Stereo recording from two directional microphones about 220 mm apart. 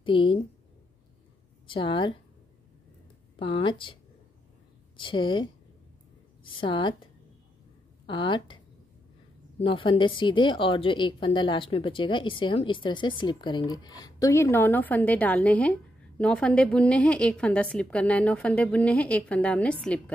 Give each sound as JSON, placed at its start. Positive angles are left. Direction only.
{"t": 0.0, "sound": "a woman's voice", "side_deg": 25}
{"t": 1.7, "sound": "a woman's voice", "side_deg": 20}
{"t": 3.3, "sound": "a woman's voice", "side_deg": 25}
{"t": 6.6, "sound": "a woman's voice", "side_deg": 20}
{"t": 8.1, "sound": "a woman's voice", "side_deg": 20}
{"t": 9.6, "sound": "a woman's voice", "side_deg": 25}